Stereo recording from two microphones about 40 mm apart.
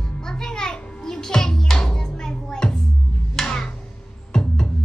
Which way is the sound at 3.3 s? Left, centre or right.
Centre.